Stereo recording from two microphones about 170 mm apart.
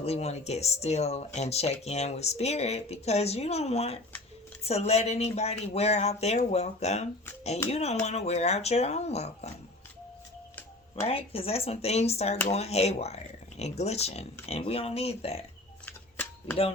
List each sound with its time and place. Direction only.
0.0 s speech: 40° left (ahead or behind)
11.0 s speech: 35° left (ahead or behind)
15.9 s shuffling cards: 10° left (ahead or behind)